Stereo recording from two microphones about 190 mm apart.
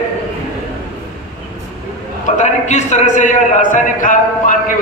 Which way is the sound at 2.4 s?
35° left (ahead or behind).